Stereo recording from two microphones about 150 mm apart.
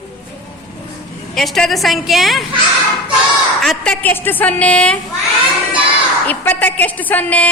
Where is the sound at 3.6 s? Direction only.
5° left (ahead or behind).